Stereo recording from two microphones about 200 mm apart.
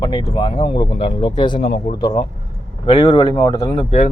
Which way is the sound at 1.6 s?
50° left (ahead or behind).